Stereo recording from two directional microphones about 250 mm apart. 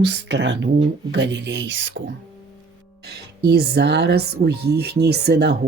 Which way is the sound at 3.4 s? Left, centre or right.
Right.